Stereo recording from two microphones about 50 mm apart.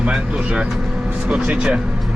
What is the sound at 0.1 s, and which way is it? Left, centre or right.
Speech, centre.